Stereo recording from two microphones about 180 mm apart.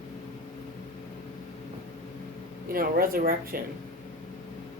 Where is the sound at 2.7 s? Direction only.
55° right (ahead or behind).